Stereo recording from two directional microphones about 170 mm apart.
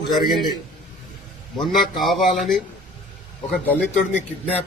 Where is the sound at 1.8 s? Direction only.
Centre (ahead or behind).